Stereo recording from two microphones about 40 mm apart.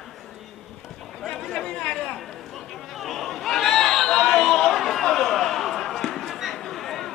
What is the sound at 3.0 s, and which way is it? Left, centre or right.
Chatter, centre.